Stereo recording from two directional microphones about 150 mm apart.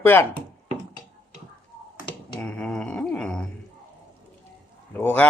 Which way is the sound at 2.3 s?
10° left (ahead or behind).